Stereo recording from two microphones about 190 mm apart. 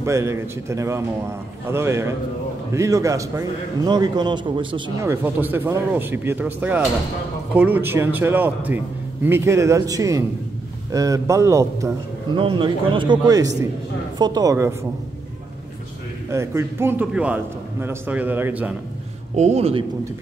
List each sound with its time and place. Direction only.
0.0 s a man's voice: 15° right (ahead or behind)
5.0 s a man's voice: 10° right (ahead or behind)
12.4 s a man's voice: 25° right (ahead or behind)
16.3 s a man's voice: 15° right (ahead or behind)
19.3 s speech: 35° right (ahead or behind)